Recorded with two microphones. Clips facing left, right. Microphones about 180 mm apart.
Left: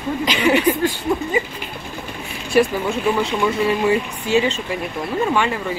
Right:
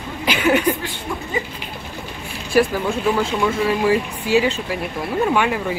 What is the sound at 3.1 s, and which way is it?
Speech, centre (ahead or behind).